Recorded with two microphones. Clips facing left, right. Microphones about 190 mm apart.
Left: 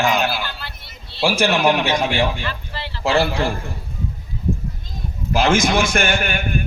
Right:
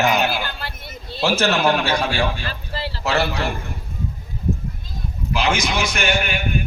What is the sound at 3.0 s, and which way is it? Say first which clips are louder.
Speech: left 4 dB; 30° left (ahead or behind).